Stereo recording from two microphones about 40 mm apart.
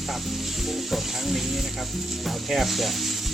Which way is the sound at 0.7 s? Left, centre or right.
Centre.